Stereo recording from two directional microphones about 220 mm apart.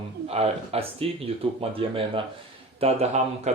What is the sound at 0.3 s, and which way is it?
Speech, 25° right (ahead or behind).